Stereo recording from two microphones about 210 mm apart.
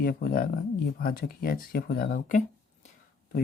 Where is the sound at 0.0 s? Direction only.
45° left (ahead or behind).